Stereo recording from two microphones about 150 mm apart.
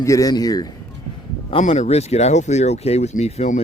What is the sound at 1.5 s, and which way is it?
Speech, 40° left (ahead or behind).